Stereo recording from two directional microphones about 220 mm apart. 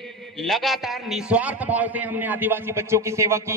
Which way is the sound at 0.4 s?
Centre (ahead or behind).